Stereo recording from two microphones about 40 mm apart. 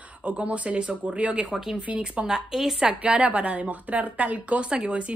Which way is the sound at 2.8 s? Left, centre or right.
Right.